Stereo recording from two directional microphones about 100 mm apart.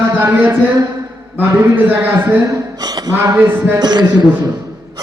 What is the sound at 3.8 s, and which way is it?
Speech, 45° right (ahead or behind).